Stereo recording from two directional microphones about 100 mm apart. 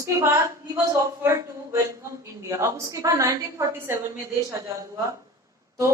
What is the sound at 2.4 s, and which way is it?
A woman's voice, 30° right (ahead or behind).